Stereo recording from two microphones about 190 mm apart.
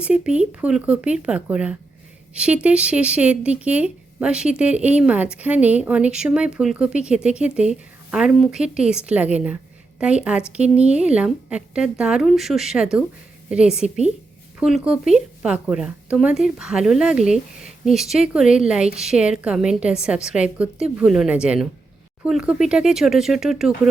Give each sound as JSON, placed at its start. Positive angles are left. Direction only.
{"t": 0.0, "sound": "speech", "side_deg": -5}